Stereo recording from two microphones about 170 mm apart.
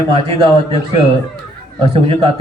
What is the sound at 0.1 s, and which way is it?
Speech, 35° right (ahead or behind).